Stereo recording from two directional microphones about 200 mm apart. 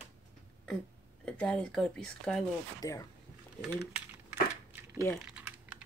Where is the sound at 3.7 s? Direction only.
5° right (ahead or behind).